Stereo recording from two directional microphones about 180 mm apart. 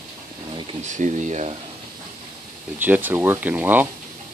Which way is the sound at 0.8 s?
40° right (ahead or behind).